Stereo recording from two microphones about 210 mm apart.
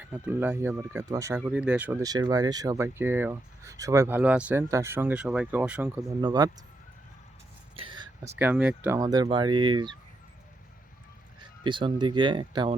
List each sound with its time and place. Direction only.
0.0 s speech: 10° right (ahead or behind)
1.4 s speech: 5° right (ahead or behind)
6.2 s speech: 20° right (ahead or behind)
7.8 s a sound: 25° right (ahead or behind)
8.4 s speech: 5° right (ahead or behind); by 9.9 s 20° right (ahead or behind)
11.6 s speech: 25° right (ahead or behind)